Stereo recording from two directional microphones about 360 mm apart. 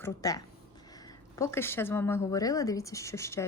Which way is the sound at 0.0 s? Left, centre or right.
Centre.